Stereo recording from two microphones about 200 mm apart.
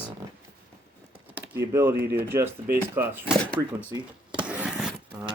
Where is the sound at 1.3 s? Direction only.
10° right (ahead or behind).